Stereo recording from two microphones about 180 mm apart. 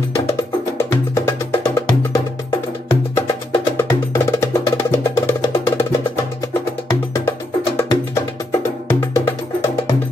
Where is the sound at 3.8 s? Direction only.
15° left (ahead or behind).